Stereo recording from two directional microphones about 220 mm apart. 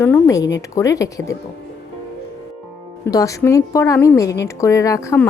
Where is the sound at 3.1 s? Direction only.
15° left (ahead or behind).